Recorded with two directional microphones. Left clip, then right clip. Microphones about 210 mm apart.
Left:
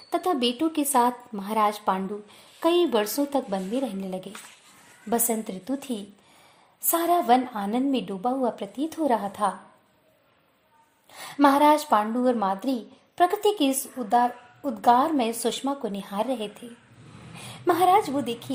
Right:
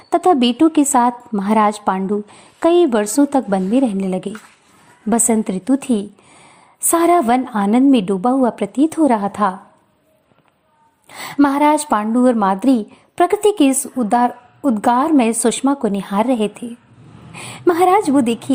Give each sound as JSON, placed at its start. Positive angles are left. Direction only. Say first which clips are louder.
{"t": 0.1, "sound": "a woman's voice", "louder": "right 11 dB", "side_deg": -25}
{"t": 11.1, "sound": "a woman's voice", "louder": "right 4 dB", "side_deg": -20}